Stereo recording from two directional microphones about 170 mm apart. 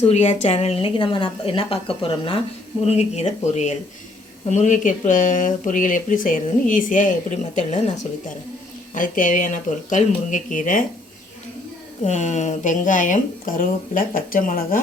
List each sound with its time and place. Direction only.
0.0 s a woman's voice: 40° left (ahead or behind)
9.0 s speech: 50° left (ahead or behind)
12.0 s speech: 45° left (ahead or behind)